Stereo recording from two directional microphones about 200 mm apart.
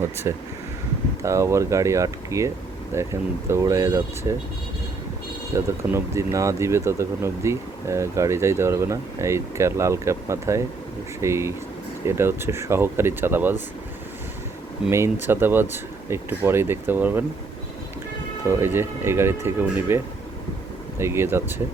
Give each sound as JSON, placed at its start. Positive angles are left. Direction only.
{"t": 0.3, "sound": "speech", "side_deg": -15}
{"t": 5.5, "sound": "speech", "side_deg": -15}
{"t": 14.8, "sound": "speech", "side_deg": -15}
{"t": 18.4, "sound": "speech", "side_deg": -10}
{"t": 21.0, "sound": "speech", "side_deg": -10}